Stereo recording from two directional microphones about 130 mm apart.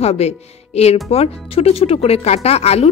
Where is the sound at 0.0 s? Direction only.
55° left (ahead or behind).